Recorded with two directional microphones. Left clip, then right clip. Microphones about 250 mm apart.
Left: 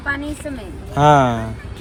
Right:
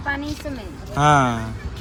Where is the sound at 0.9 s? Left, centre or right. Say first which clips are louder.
Left 4 dB; centre.